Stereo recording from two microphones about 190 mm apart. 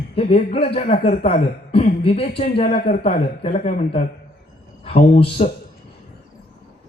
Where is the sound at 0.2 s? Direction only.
30° left (ahead or behind).